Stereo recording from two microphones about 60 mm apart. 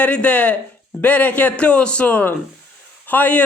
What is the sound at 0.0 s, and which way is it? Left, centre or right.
Speech, left.